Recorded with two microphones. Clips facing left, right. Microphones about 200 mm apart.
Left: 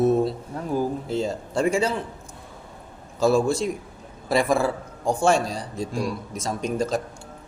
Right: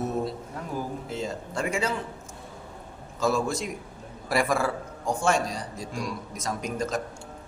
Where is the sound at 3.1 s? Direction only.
30° left (ahead or behind).